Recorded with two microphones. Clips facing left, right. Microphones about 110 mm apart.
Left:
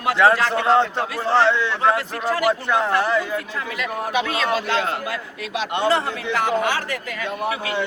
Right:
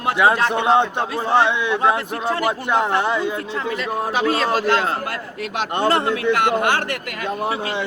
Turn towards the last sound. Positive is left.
turn(degrees=-30)  # may be behind; listen again after turning